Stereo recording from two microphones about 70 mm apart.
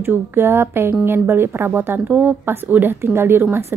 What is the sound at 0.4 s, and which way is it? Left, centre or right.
A woman's voice, right.